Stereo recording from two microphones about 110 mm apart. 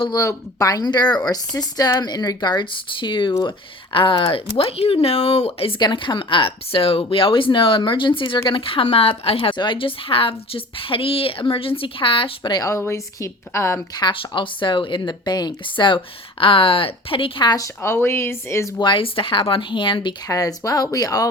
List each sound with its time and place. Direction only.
0.2 s a woman's voice: 30° left (ahead or behind); by 5.7 s 65° left (ahead or behind)
5.8 s a woman's voice: 45° left (ahead or behind)
12.6 s a woman's voice: 25° left (ahead or behind)
14.0 s speech: 50° left (ahead or behind)
17.8 s a woman's voice: 20° left (ahead or behind)
18.8 s speech: 50° left (ahead or behind)
20.2 s speech: 35° left (ahead or behind)